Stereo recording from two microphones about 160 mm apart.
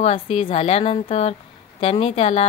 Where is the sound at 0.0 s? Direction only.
35° left (ahead or behind).